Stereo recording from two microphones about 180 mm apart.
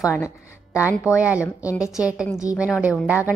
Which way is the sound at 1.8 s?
5° right (ahead or behind).